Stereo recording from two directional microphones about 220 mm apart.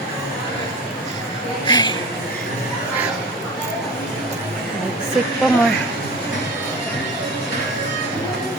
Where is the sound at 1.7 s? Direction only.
20° left (ahead or behind).